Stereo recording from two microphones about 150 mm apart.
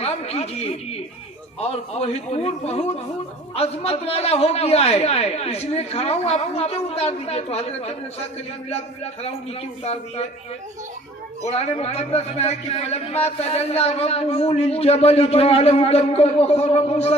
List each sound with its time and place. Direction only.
0.0 s a woman's voice: 45° left (ahead or behind)
9.8 s a man's voice: 45° left (ahead or behind)
11.4 s a man's voice: 45° left (ahead or behind)